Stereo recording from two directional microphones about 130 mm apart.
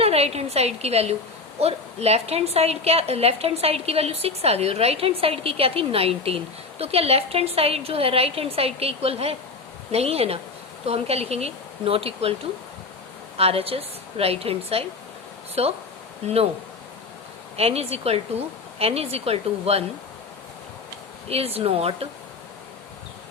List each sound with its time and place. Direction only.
0.0 s a woman's voice: 50° right (ahead or behind)
13.3 s a woman's voice: 50° right (ahead or behind)
17.6 s a woman's voice: 50° right (ahead or behind)
21.2 s a woman's voice: 50° right (ahead or behind)